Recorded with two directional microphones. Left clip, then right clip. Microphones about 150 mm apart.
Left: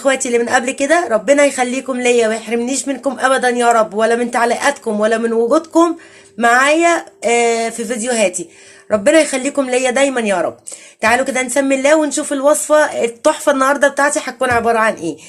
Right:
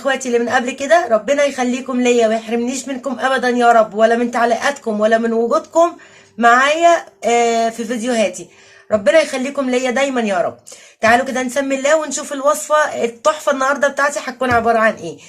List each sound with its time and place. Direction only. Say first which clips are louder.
0.0 s a woman's voice: left 2 dB; 40° left (ahead or behind)